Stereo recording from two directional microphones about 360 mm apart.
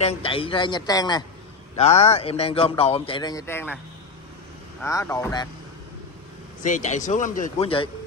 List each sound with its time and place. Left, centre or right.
0.0 s speech: centre
4.8 s speech: centre
6.6 s speech: left